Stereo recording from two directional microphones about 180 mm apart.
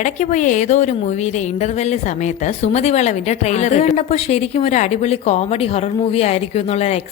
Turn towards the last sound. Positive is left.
turn(degrees=35)  # may be behind; listen again after turning